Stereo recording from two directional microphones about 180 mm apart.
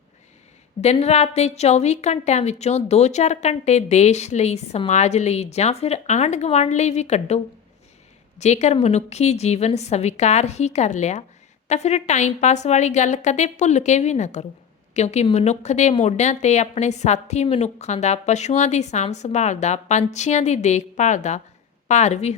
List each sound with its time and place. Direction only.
0.8 s a woman's voice: 35° left (ahead or behind)